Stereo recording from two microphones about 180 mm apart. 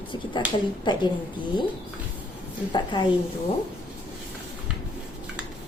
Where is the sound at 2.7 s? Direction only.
25° left (ahead or behind).